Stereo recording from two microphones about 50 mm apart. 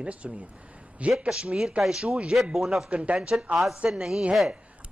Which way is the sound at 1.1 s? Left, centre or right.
Centre.